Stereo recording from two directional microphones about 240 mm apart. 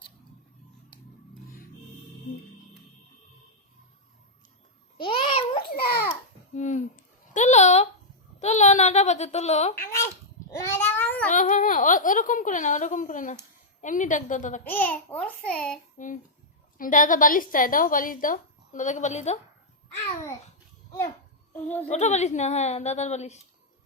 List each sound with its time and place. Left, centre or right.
1.3 s music: left
4.9 s babbling: left
5.7 s babbling: left
7.3 s a sound: left
10.5 s babbling: centre
11.3 s a sound: left
13.8 s a woman's voice: left
14.7 s a child's voice: centre
16.7 s a woman's voice: left
21.5 s speech: centre
21.8 s a woman's voice: left